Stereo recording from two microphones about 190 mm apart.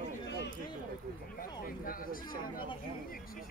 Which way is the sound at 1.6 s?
50° left (ahead or behind).